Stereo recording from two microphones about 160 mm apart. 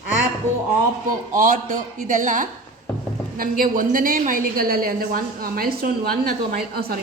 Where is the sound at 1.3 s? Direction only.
55° right (ahead or behind).